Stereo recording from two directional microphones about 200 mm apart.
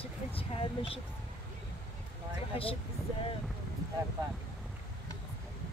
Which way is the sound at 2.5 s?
30° left (ahead or behind).